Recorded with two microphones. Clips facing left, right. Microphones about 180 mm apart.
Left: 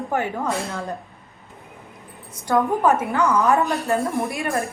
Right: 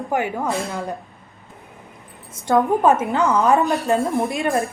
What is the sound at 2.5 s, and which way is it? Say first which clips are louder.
A woman's voice: right 3 dB; 20° right (ahead or behind).